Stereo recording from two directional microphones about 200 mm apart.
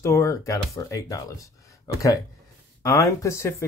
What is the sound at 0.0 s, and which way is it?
Speech, 15° left (ahead or behind).